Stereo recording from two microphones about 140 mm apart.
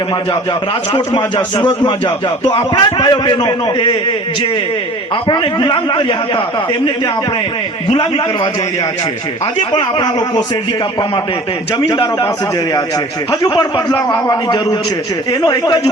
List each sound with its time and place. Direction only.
0.9 s a man's voice: 35° left (ahead or behind)
5.3 s a man's voice: 35° left (ahead or behind)
9.7 s a man's voice: 30° left (ahead or behind)
11.8 s a man's voice: 30° left (ahead or behind)
13.4 s a man's voice: 25° left (ahead or behind)
15.3 s a man's voice: 30° left (ahead or behind)